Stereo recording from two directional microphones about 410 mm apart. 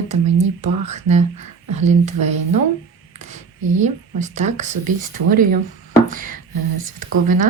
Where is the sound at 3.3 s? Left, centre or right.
Centre.